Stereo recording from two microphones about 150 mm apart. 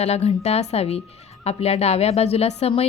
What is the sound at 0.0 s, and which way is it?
A woman's voice, 45° left (ahead or behind).